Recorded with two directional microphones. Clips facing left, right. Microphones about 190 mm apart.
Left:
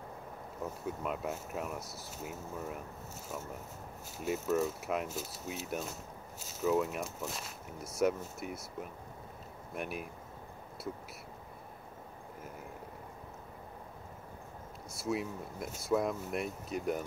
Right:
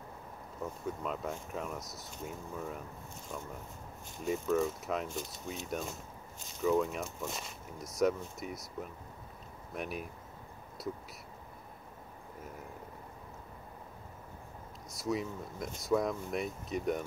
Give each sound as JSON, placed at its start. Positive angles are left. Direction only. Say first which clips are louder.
{"t": 0.8, "sound": "speech", "louder": "left 1 dB", "side_deg": 5}
{"t": 1.8, "sound": "speech", "louder": "left 1 dB", "side_deg": 30}
{"t": 2.0, "sound": "speech", "louder": "even", "side_deg": 5}
{"t": 4.2, "sound": "speech", "louder": "right 1 dB", "side_deg": 5}
{"t": 9.8, "sound": "speech", "louder": "even", "side_deg": 0}
{"t": 15.0, "sound": "speech", "louder": "even", "side_deg": 5}